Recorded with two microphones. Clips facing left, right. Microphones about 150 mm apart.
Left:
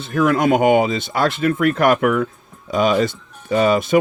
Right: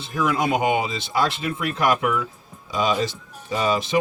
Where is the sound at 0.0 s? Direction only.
55° left (ahead or behind).